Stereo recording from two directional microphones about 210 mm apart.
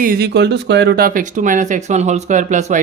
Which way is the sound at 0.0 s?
45° right (ahead or behind).